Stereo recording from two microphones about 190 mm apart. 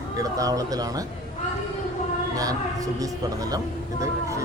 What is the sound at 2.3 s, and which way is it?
Speech, 20° right (ahead or behind).